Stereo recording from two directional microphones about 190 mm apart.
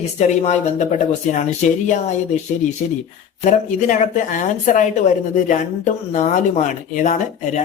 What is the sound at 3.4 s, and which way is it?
A woman's voice, 40° left (ahead or behind).